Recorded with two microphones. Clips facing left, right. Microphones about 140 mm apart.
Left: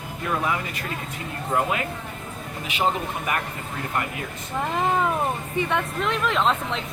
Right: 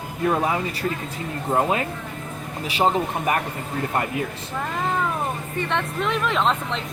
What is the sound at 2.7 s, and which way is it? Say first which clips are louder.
Speech: right 4 dB; 35° right (ahead or behind).